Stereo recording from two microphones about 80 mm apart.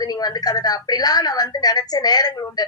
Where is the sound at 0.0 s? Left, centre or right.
Left.